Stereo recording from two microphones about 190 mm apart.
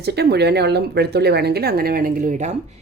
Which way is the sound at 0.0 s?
60° right (ahead or behind).